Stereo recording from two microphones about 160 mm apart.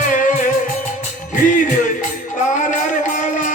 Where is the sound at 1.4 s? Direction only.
55° left (ahead or behind).